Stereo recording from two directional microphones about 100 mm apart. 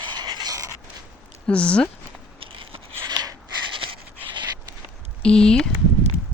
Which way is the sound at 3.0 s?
40° right (ahead or behind).